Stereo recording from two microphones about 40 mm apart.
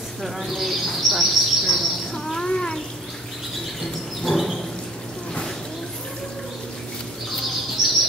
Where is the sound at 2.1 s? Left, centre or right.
Centre.